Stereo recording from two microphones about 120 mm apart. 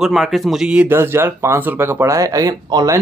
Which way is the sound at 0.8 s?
20° right (ahead or behind).